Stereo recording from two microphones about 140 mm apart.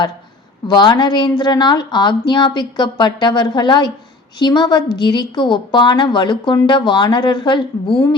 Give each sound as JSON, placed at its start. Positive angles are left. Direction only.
{"t": 0.7, "sound": "a woman's voice", "side_deg": 30}